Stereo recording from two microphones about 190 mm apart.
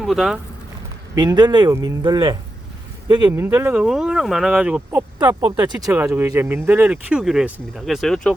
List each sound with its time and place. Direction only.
0.0 s speech: centre (ahead or behind)
1.1 s speech: 20° right (ahead or behind); by 8.4 s 5° left (ahead or behind)